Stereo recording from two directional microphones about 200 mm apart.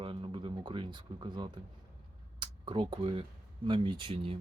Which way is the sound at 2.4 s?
25° right (ahead or behind).